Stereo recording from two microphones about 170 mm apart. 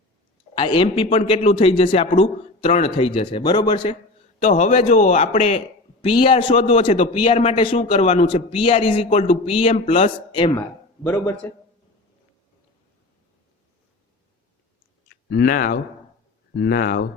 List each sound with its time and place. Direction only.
0.5 s a man's voice: 30° left (ahead or behind)
4.4 s a man's voice: 45° left (ahead or behind)
10.6 s a man's voice: 10° left (ahead or behind)
15.3 s speech: 60° left (ahead or behind)